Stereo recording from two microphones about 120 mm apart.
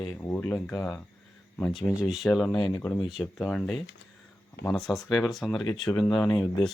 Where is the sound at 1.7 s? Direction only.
Centre (ahead or behind).